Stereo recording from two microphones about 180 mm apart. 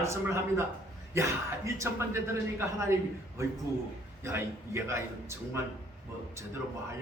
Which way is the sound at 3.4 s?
15° right (ahead or behind).